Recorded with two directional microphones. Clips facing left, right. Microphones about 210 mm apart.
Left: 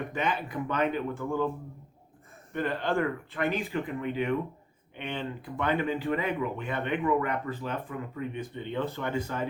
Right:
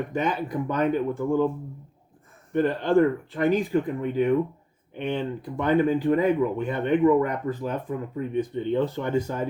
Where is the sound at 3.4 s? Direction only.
40° right (ahead or behind).